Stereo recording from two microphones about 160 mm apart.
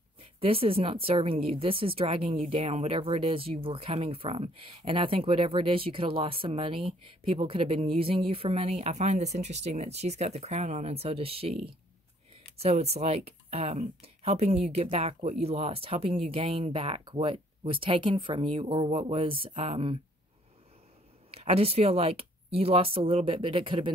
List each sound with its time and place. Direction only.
0.4 s speech: 35° right (ahead or behind)
21.3 s speech: 35° right (ahead or behind)